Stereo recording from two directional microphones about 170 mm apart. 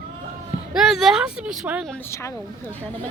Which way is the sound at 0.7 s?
Centre (ahead or behind).